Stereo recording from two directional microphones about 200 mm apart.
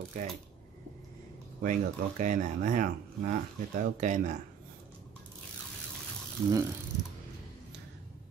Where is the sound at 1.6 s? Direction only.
40° right (ahead or behind).